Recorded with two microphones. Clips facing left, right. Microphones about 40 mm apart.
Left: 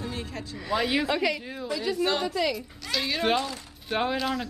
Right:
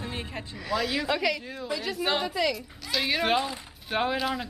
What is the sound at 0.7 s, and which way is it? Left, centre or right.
Speech, centre.